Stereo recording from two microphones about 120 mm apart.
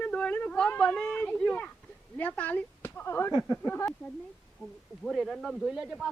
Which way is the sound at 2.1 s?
15° left (ahead or behind).